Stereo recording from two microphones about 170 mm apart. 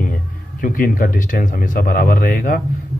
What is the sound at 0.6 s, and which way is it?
Speech, 55° left (ahead or behind).